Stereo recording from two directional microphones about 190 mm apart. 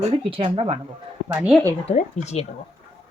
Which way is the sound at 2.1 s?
35° left (ahead or behind).